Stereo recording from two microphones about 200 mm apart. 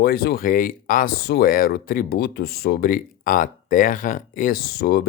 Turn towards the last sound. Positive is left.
turn(degrees=50)  # may be behind; listen again after turning